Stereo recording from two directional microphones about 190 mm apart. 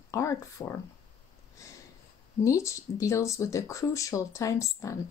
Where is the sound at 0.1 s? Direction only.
15° left (ahead or behind).